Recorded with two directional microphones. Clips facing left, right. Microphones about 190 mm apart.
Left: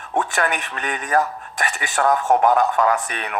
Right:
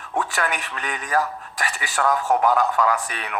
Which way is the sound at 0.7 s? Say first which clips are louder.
Left 3 dB; 40° left (ahead or behind).